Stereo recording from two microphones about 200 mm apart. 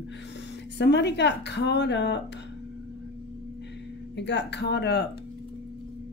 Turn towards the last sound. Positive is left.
turn(degrees=55)  # may be behind; listen again after turning